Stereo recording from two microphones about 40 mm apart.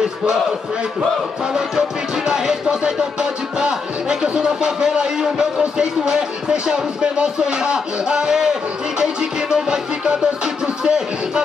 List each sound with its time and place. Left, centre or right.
1.5 s speech: centre